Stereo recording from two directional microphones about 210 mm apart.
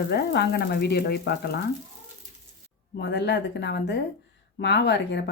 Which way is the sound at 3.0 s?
55° left (ahead or behind).